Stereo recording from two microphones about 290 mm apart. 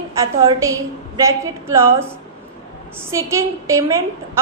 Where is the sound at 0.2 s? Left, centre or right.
Centre.